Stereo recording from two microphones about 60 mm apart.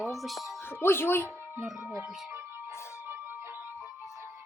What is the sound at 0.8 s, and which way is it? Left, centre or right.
Speech, left.